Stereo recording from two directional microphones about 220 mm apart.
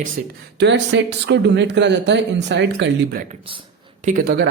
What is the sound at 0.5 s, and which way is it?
Speech, 50° right (ahead or behind).